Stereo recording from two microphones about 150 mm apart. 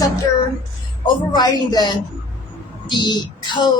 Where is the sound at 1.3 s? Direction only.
25° left (ahead or behind).